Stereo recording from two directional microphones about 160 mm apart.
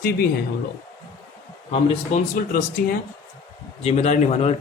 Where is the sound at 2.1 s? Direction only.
45° left (ahead or behind).